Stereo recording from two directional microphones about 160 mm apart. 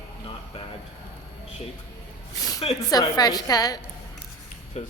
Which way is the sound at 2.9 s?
25° left (ahead or behind).